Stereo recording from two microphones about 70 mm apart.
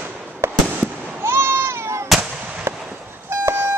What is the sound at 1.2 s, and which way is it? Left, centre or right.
Baby cry, right.